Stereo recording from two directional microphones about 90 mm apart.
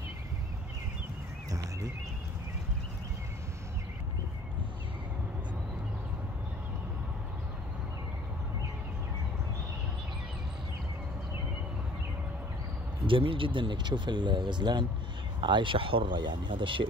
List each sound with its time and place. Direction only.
13.0 s speech: 75° right (ahead or behind)